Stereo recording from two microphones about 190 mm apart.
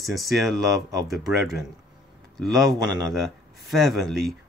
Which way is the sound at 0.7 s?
20° right (ahead or behind).